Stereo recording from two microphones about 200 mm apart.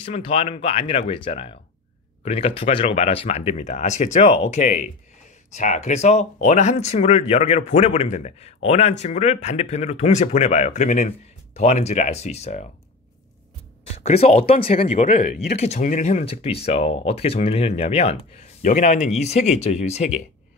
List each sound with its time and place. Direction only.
0.0 s speech: 30° left (ahead or behind)
13.8 s speech: 30° left (ahead or behind)